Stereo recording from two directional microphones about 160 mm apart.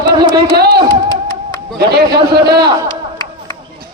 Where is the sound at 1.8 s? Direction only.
90° right.